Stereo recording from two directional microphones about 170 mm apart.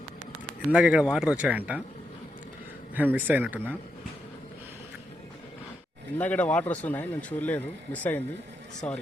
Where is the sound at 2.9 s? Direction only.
10° right (ahead or behind).